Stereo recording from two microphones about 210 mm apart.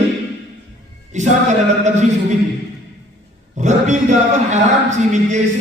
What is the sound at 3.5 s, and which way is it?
A man's voice, 35° right (ahead or behind).